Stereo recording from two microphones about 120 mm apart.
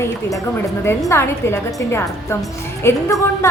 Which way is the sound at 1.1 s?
20° left (ahead or behind).